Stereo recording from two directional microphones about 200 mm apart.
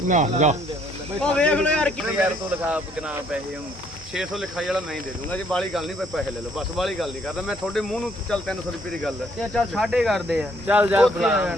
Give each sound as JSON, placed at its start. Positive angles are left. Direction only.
{"t": 0.1, "sound": "speech", "side_deg": -35}
{"t": 1.2, "sound": "speech", "side_deg": 5}
{"t": 2.0, "sound": "speech", "side_deg": -5}
{"t": 4.1, "sound": "speech", "side_deg": 0}
{"t": 9.6, "sound": "speech", "side_deg": 0}